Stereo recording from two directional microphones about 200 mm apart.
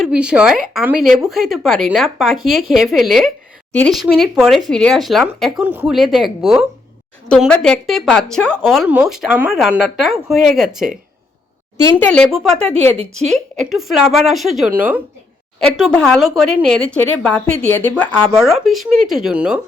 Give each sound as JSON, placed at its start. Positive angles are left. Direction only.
{"t": 0.0, "sound": "a woman's voice", "side_deg": -5}
{"t": 11.9, "sound": "a woman's voice", "side_deg": 5}
{"t": 15.6, "sound": "a woman's voice", "side_deg": 5}